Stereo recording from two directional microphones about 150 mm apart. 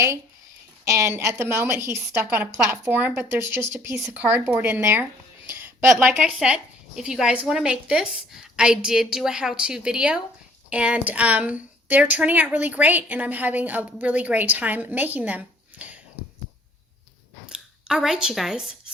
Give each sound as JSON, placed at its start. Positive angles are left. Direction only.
{"t": 0.9, "sound": "a woman's voice", "side_deg": -20}
{"t": 17.4, "sound": "speech", "side_deg": -5}